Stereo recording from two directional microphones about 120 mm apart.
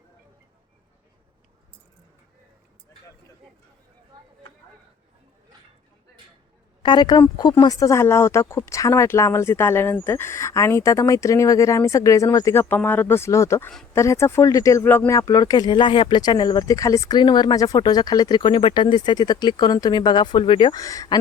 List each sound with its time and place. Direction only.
6.8 s speech: 40° left (ahead or behind)
20.7 s speech: 30° left (ahead or behind)